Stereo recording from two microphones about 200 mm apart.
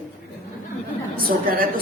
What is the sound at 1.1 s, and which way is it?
Speech, 45° right (ahead or behind).